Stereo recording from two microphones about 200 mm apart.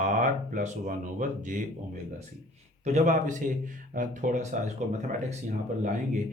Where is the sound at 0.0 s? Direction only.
40° right (ahead or behind).